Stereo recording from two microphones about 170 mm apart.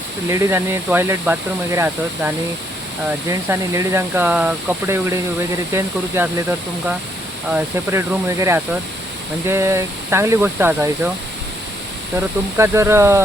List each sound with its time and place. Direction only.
0.3 s speech: 15° right (ahead or behind)
12.1 s speech: 15° right (ahead or behind)